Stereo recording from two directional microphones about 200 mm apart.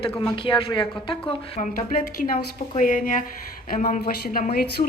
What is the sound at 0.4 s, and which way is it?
Speech, 25° left (ahead or behind).